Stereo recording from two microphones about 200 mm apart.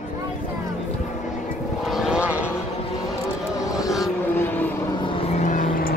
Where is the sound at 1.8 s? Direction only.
Centre (ahead or behind).